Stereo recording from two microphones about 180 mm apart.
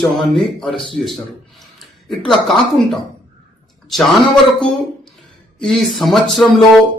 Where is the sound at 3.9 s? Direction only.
Centre (ahead or behind).